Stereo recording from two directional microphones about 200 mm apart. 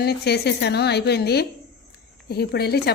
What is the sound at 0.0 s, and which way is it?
A woman's voice, 55° left (ahead or behind).